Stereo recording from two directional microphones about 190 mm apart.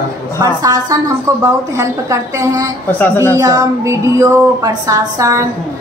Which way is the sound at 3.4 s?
20° right (ahead or behind).